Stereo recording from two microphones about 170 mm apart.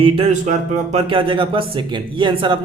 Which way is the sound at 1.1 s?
30° right (ahead or behind).